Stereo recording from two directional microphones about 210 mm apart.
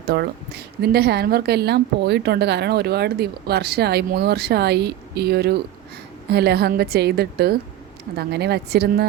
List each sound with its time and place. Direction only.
0.1 s a woman's voice: 50° right (ahead or behind)